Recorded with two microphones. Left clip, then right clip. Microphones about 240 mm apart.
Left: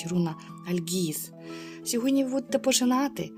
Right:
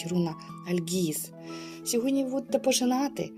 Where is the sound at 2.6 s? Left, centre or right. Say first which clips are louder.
Left 2 dB; left.